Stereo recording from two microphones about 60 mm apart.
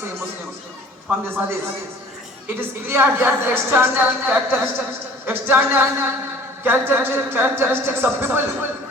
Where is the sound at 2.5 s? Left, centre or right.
Right.